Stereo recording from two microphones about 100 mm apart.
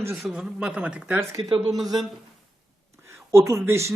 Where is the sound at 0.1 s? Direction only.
5° right (ahead or behind).